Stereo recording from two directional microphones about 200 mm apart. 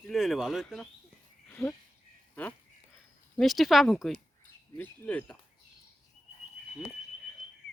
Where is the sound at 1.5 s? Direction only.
10° left (ahead or behind).